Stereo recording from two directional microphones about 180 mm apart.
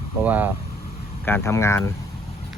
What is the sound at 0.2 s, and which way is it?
Speech, 10° right (ahead or behind).